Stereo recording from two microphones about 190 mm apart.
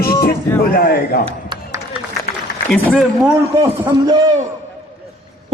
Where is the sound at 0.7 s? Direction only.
55° left (ahead or behind).